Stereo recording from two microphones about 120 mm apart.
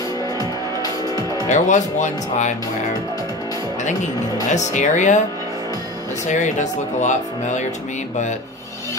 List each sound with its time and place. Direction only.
0.4 s music: 30° left (ahead or behind)
1.5 s speech: 90° left
4.5 s speech: 85° left
6.2 s speech: 85° left